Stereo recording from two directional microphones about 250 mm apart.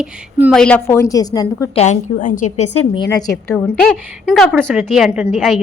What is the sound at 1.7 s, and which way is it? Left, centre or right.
A woman's voice, left.